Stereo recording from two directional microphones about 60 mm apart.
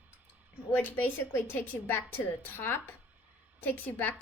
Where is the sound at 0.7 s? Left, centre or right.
Left.